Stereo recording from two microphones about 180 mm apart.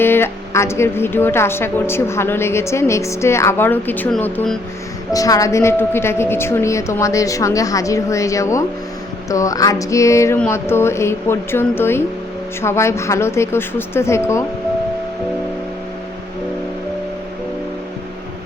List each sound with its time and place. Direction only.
0.0 s a woman's voice: 15° left (ahead or behind)
5.1 s a woman's voice: 20° left (ahead or behind)